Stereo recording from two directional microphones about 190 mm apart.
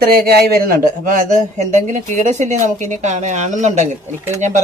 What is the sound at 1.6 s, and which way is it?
A woman's voice, 40° right (ahead or behind).